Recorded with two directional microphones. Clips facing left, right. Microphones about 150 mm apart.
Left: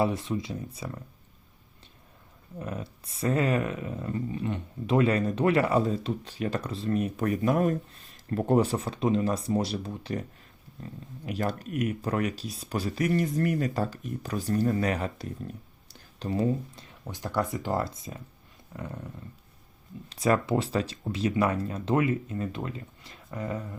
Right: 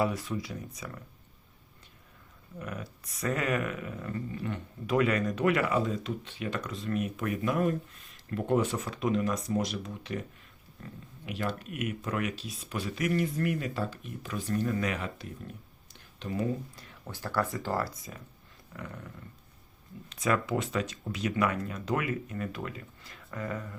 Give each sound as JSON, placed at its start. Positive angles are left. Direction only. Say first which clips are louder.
{"t": 0.0, "sound": "speech", "louder": "left 3 dB", "side_deg": 25}
{"t": 2.6, "sound": "speech", "louder": "left 3 dB", "side_deg": 30}
{"t": 11.3, "sound": "speech", "louder": "left 4 dB", "side_deg": 40}
{"t": 17.1, "sound": "speech", "louder": "left 2 dB", "side_deg": 15}
{"t": 18.7, "sound": "dog", "louder": "left 4 dB", "side_deg": 25}
{"t": 20.1, "sound": "speech", "louder": "left 4 dB", "side_deg": 35}